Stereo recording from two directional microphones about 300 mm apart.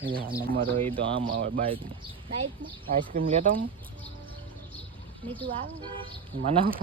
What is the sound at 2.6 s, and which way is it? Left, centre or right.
Speech, right.